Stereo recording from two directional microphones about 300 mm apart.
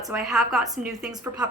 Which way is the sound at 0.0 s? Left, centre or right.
Centre.